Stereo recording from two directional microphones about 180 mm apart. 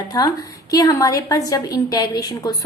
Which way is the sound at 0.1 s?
20° left (ahead or behind).